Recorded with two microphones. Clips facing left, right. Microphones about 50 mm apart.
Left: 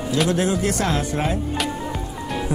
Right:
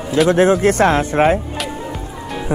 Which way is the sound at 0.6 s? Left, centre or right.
Right.